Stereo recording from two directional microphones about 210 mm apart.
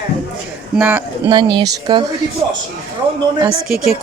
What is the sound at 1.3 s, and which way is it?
Speech, 20° right (ahead or behind).